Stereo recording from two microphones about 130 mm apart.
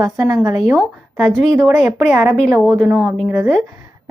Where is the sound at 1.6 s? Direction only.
15° right (ahead or behind).